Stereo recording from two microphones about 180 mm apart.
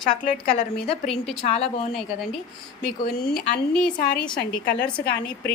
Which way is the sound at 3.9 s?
50° left (ahead or behind).